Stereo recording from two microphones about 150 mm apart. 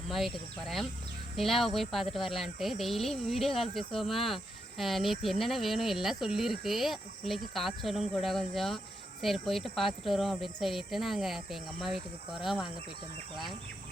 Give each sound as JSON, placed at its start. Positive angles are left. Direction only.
{"t": 0.1, "sound": "speech", "side_deg": 0}